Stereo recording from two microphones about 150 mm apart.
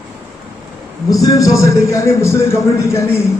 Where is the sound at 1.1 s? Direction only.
25° left (ahead or behind).